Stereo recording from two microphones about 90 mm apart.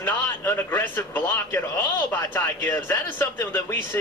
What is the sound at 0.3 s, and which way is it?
Speech, 25° left (ahead or behind).